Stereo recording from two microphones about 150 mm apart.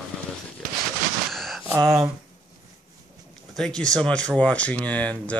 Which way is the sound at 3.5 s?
5° left (ahead or behind).